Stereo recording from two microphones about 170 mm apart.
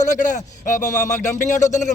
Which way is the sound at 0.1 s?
50° left (ahead or behind).